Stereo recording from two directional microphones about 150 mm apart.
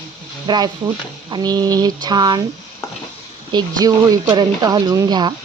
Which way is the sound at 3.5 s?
25° right (ahead or behind).